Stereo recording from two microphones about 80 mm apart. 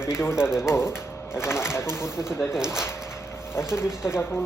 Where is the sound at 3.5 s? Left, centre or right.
Left.